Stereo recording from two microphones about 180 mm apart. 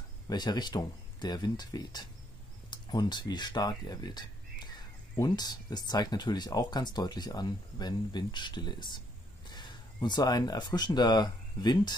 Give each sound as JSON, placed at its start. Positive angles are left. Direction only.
{"t": 0.3, "sound": "speech", "side_deg": 25}